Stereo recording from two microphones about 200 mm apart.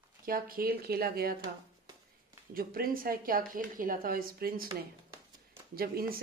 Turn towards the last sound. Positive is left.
turn(degrees=-45)  # may be behind; listen again after turning